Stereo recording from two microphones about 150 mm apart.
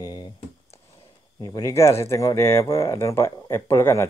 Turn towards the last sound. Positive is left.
turn(degrees=15)  # may be behind; listen again after turning